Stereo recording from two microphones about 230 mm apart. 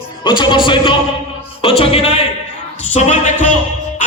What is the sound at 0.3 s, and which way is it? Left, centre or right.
Speech, centre.